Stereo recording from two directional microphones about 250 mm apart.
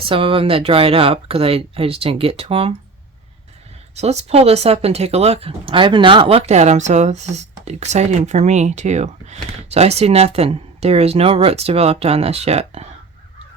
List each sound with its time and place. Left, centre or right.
0.0 s speech: right
3.9 s speech: right